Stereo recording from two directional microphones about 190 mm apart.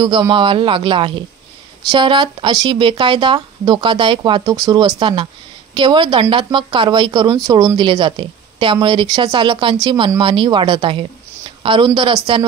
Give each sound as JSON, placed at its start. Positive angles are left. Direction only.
{"t": 0.0, "sound": "speech", "side_deg": -25}